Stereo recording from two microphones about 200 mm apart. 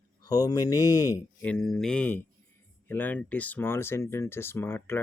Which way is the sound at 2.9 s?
10° left (ahead or behind).